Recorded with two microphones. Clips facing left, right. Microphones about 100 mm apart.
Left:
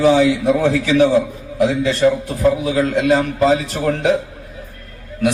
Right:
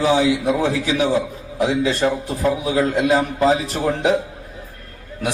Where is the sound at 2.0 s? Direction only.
30° right (ahead or behind).